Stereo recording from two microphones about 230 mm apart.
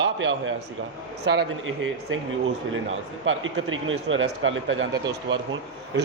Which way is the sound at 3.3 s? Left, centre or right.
Right.